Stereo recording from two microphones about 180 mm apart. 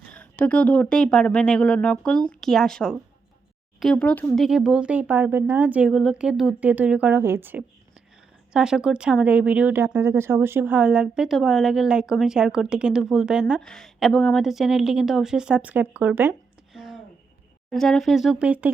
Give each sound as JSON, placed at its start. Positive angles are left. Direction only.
{"t": 0.1, "sound": "speech", "side_deg": 10}
{"t": 4.4, "sound": "speech", "side_deg": -5}
{"t": 16.7, "sound": "a sound", "side_deg": 0}
{"t": 17.7, "sound": "speech", "side_deg": 0}